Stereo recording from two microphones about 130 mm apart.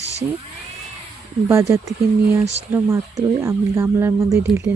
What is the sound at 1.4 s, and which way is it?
Speech, 20° right (ahead or behind).